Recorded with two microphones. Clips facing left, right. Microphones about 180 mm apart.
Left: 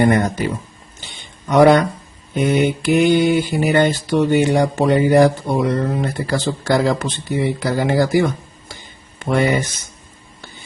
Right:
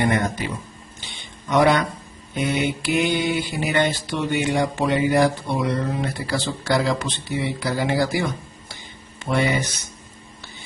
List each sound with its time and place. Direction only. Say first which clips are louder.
0.0 s speech: left 6 dB; 40° left (ahead or behind)
1.5 s mantra: left 6 dB; 45° left (ahead or behind)
9.1 s speech: left 5 dB; 50° left (ahead or behind)